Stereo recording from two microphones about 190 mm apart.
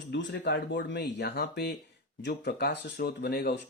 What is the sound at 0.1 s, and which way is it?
Speech, 70° left (ahead or behind).